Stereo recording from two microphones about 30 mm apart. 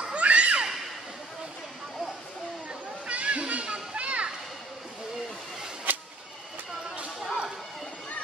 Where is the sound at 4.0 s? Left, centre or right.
Right.